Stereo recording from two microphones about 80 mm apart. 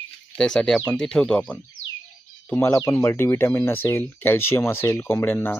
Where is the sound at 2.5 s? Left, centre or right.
Left.